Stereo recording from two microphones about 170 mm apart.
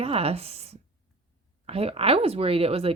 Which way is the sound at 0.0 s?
35° right (ahead or behind).